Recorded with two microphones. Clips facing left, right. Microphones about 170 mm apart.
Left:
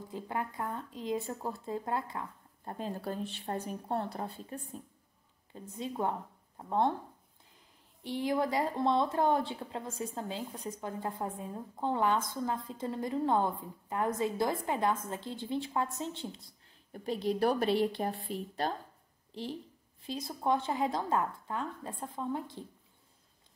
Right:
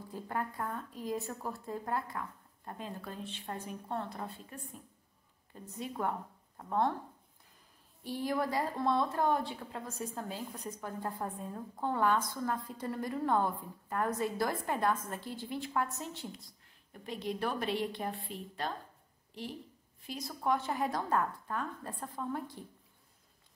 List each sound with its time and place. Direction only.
0.1 s a woman's voice: 15° left (ahead or behind)
8.0 s a woman's voice: 20° left (ahead or behind)
16.9 s speech: 35° left (ahead or behind)
20.0 s a woman's voice: 25° left (ahead or behind)